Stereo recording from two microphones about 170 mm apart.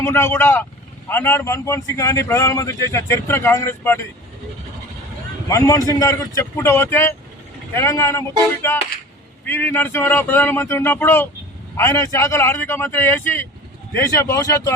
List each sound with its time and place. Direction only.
0.0 s a man's voice: 15° left (ahead or behind)
5.5 s a man's voice: 15° left (ahead or behind)